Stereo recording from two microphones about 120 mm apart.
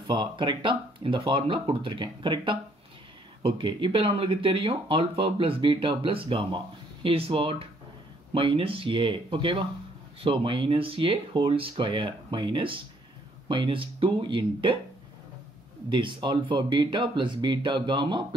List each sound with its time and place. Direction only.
0.0 s speech: 40° right (ahead or behind)
15.9 s speech: 40° right (ahead or behind)